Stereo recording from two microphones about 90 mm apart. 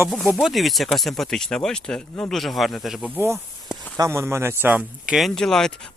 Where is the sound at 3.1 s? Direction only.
25° right (ahead or behind).